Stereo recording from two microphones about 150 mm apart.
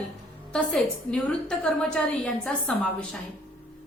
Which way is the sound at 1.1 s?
5° left (ahead or behind).